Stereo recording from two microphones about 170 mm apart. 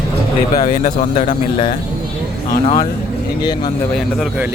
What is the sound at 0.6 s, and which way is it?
Speech, 45° left (ahead or behind).